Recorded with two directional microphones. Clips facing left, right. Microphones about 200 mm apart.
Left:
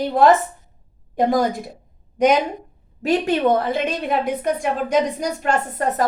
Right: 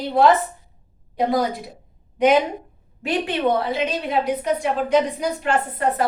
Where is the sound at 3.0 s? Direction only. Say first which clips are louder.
Left 4 dB; 45° left (ahead or behind).